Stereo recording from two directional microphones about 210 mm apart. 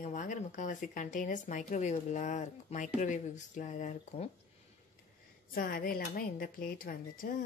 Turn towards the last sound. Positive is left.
turn(degrees=40)  # may be behind; listen again after turning